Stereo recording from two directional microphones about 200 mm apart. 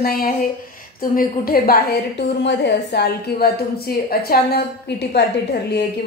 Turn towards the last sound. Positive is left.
turn(degrees=55)  # may be behind; listen again after turning